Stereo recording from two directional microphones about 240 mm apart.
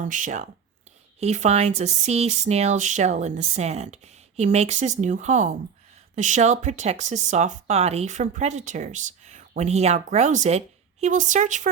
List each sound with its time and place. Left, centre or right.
0.0 s speech: right